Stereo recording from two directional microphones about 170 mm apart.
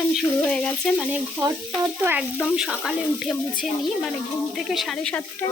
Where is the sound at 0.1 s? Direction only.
5° left (ahead or behind).